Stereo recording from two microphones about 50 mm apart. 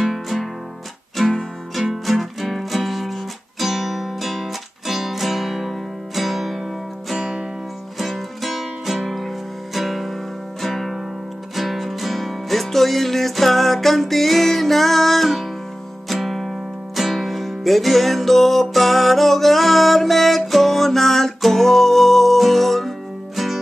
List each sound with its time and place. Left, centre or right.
0.0 s music: centre
1.8 s music: centre